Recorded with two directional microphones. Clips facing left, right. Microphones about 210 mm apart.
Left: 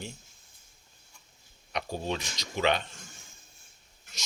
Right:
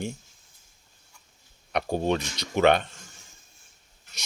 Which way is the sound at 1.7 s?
60° right (ahead or behind).